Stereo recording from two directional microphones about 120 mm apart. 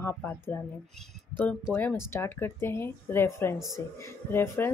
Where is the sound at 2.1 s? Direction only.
20° left (ahead or behind).